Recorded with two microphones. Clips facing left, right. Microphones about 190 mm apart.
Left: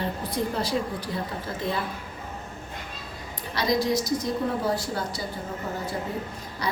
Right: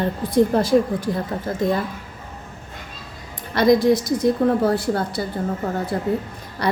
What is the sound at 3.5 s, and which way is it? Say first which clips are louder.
Speech: right 9 dB; 55° right (ahead or behind).